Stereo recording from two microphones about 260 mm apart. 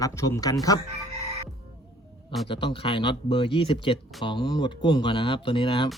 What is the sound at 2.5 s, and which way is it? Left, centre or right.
Speech, centre.